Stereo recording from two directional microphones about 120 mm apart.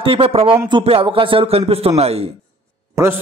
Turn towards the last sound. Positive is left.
turn(degrees=-20)  # may be behind; listen again after turning